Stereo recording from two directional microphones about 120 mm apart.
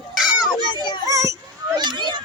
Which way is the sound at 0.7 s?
40° left (ahead or behind).